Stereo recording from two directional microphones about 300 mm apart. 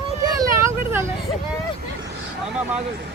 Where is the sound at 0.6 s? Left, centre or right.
Centre.